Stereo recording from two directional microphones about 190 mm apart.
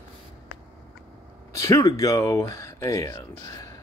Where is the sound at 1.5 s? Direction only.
15° left (ahead or behind).